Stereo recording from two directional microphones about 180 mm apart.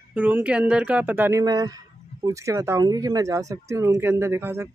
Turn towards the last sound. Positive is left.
turn(degrees=-15)  # may be behind; listen again after turning